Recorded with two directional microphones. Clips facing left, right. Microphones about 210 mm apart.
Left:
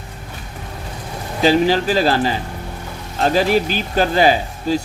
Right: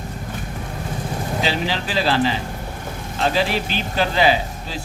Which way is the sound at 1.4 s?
45° left (ahead or behind).